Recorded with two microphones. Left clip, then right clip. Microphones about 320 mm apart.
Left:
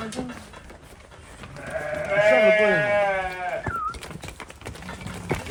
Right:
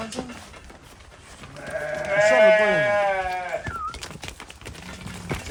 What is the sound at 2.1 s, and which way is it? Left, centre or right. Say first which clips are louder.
Speech: right 1 dB; right.